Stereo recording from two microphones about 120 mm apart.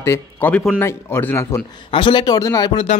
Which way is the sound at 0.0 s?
20° left (ahead or behind).